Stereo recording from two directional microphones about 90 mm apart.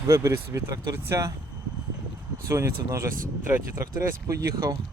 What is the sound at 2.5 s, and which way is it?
Speech, 35° right (ahead or behind).